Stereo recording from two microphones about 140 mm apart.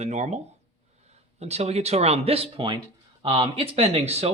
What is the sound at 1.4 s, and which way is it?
Speech, 50° right (ahead or behind).